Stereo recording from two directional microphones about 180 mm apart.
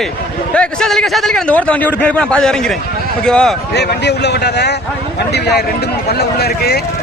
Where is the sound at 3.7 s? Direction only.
70° left (ahead or behind).